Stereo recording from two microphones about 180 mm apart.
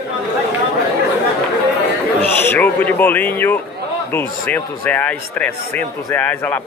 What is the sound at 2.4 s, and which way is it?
Speech, 10° left (ahead or behind).